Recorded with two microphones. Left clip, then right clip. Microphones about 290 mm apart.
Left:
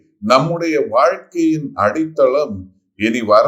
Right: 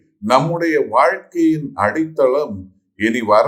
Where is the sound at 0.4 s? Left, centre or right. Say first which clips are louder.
Even; centre.